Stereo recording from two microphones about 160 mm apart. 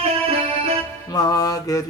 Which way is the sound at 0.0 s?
40° right (ahead or behind).